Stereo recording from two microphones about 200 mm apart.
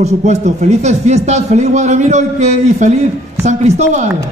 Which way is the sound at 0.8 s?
35° right (ahead or behind).